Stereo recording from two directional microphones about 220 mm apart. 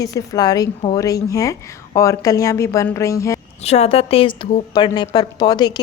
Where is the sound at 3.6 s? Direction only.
30° left (ahead or behind).